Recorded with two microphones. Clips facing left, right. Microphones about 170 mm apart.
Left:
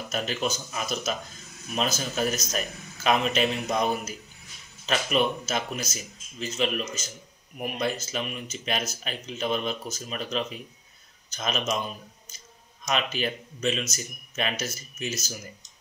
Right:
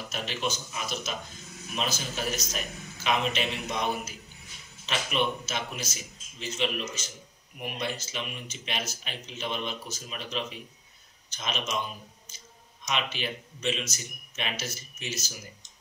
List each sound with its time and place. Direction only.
0.1 s speech: 45° left (ahead or behind)
12.8 s speech: 45° left (ahead or behind)